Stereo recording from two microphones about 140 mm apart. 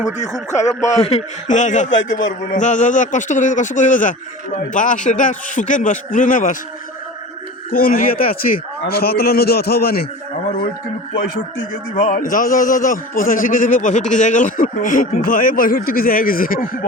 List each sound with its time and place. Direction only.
0.3 s speech: 20° left (ahead or behind)
0.8 s a man's voice: 50° left (ahead or behind); by 6.6 s 70° left (ahead or behind)
7.7 s a man's voice: 90° left
11.7 s a man's voice: 75° left (ahead or behind); by 16.8 s 90° left